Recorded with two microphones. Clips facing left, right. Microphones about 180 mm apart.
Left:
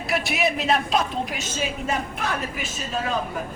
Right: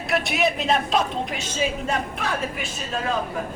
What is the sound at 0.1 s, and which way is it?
Speech, centre (ahead or behind).